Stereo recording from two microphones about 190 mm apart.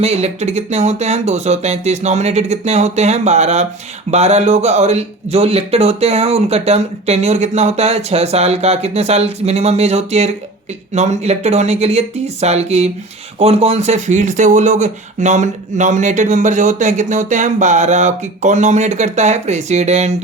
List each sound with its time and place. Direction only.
0.0 s speech: 35° right (ahead or behind)